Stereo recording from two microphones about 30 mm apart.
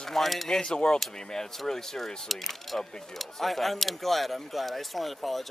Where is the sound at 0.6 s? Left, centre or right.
Left.